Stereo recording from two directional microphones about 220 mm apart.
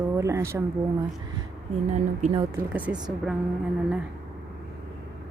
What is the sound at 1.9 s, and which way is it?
Speech, 30° right (ahead or behind).